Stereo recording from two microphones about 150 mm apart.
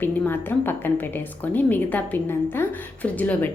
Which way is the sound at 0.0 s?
15° left (ahead or behind).